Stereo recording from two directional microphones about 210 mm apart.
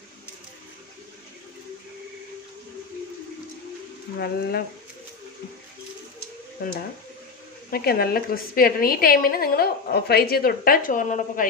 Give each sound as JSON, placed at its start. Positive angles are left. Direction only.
{"t": 4.2, "sound": "a woman's voice", "side_deg": 45}
{"t": 6.6, "sound": "a woman's voice", "side_deg": 45}